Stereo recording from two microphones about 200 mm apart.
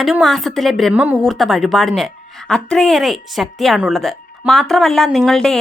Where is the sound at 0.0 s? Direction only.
Centre (ahead or behind).